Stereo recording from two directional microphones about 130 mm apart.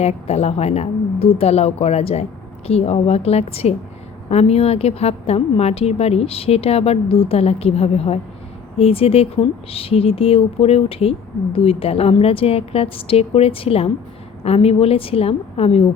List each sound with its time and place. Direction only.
0.0 s a woman's voice: 55° left (ahead or behind)